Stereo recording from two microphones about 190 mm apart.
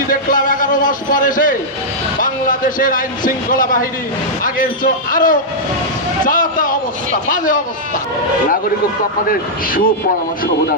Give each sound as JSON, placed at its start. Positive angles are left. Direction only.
{"t": 0.1, "sound": "a man's voice", "side_deg": 45}
{"t": 9.3, "sound": "speech", "side_deg": 50}